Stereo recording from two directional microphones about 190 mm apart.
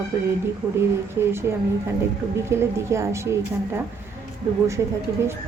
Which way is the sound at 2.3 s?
15° right (ahead or behind).